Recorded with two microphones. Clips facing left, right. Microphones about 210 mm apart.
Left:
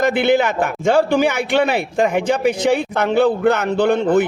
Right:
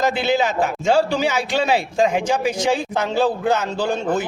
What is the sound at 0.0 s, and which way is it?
A man's voice, 55° left (ahead or behind).